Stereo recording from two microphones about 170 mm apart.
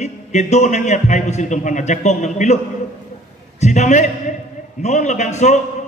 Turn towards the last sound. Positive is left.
turn(degrees=40)  # may be behind; listen again after turning